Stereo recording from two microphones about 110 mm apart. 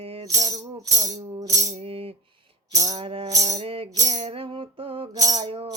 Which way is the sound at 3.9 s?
35° right (ahead or behind).